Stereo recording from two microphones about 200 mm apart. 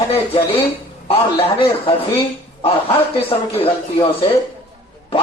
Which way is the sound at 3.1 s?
30° left (ahead or behind).